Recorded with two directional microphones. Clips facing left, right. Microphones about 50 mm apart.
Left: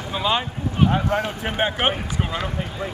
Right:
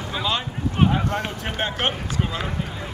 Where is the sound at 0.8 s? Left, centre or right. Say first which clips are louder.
Left 2 dB; left.